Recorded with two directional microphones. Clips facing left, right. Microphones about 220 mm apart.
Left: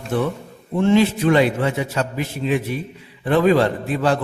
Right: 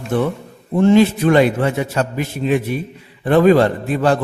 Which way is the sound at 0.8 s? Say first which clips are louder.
Right 4 dB; 45° right (ahead or behind).